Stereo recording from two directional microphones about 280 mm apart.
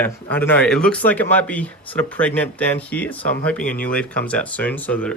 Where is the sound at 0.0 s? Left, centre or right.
Centre.